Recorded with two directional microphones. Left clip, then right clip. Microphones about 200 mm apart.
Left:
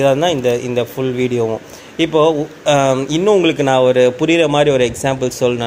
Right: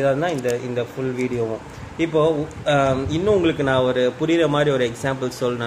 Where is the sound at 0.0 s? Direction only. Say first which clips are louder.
Left 7 dB; 30° left (ahead or behind).